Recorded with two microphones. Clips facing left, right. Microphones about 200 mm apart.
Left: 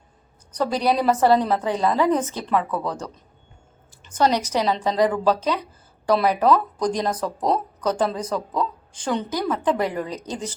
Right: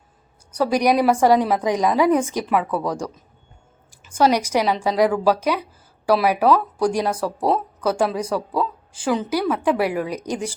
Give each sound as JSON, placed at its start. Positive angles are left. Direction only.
{"t": 0.5, "sound": "speech", "side_deg": -10}